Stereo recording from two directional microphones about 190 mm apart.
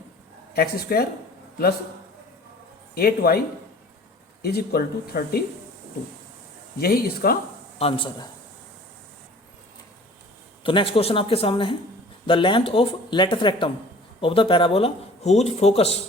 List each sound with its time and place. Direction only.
0.5 s speech: 55° left (ahead or behind)
2.9 s speech: 55° left (ahead or behind)
4.4 s speech: 55° left (ahead or behind)
6.7 s speech: 55° left (ahead or behind)
7.8 s speech: 30° left (ahead or behind)
10.6 s speech: 25° left (ahead or behind)